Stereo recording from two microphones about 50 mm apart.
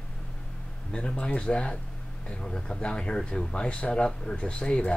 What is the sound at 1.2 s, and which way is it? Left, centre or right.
Speech, centre.